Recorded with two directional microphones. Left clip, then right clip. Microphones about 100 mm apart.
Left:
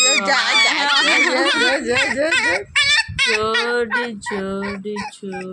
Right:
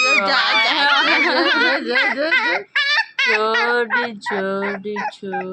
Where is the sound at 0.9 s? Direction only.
20° right (ahead or behind).